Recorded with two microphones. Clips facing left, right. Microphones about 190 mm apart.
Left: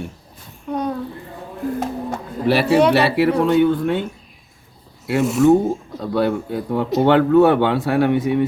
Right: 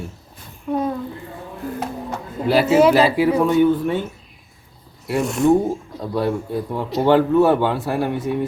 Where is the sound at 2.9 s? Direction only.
70° left (ahead or behind).